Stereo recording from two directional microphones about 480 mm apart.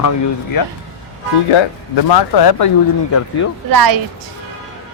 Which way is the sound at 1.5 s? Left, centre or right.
Left.